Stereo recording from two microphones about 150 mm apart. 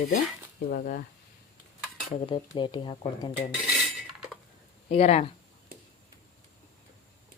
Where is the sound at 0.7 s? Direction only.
75° left (ahead or behind).